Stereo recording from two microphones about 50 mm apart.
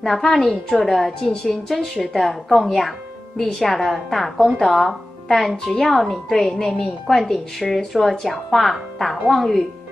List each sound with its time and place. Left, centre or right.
0.0 s speech: centre